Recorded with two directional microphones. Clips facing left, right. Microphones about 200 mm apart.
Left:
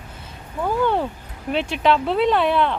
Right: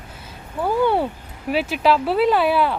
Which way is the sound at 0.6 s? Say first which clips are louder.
Right 2 dB; 10° right (ahead or behind).